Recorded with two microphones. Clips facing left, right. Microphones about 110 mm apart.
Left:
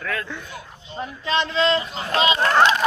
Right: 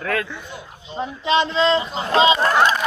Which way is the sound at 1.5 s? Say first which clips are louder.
Right 2 dB; 30° right (ahead or behind).